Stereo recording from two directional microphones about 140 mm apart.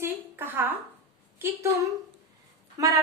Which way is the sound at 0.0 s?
15° right (ahead or behind).